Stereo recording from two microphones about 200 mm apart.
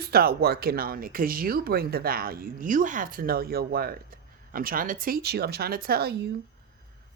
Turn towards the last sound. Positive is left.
turn(degrees=-50)  # may be behind; listen again after turning